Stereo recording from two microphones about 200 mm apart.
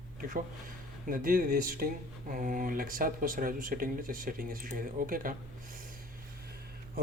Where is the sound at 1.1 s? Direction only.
45° right (ahead or behind).